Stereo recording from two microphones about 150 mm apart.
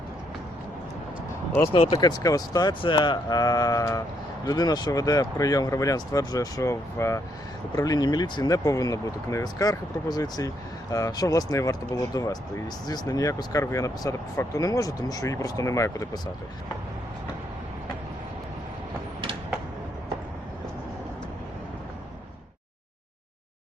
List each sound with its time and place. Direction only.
1.7 s speech: 40° left (ahead or behind)
2.0 s speech: 25° left (ahead or behind)